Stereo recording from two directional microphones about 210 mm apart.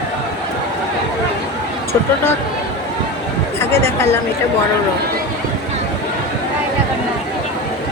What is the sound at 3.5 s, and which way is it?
Speech, 10° left (ahead or behind).